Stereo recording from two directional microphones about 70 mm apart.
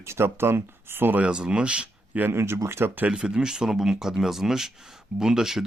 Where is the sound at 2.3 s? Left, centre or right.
Right.